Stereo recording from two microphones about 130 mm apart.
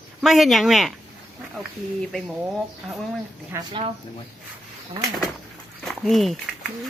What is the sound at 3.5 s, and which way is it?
Speech, 20° right (ahead or behind).